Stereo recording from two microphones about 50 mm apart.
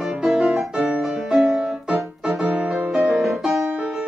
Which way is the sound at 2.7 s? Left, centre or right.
Centre.